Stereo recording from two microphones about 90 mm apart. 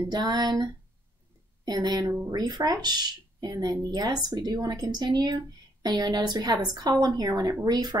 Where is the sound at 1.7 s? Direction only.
50° right (ahead or behind).